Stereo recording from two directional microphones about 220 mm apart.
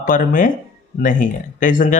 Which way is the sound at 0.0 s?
40° left (ahead or behind).